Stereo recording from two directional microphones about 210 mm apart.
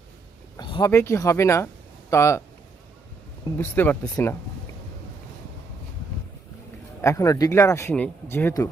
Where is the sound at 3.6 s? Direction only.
10° left (ahead or behind).